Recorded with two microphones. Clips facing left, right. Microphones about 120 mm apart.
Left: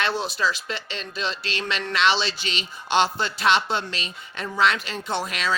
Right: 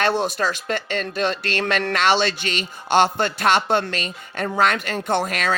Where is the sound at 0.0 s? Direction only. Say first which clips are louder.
Right 4 dB; 45° right (ahead or behind).